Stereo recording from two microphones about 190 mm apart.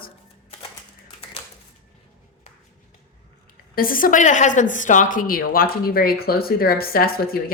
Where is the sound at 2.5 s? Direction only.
35° left (ahead or behind).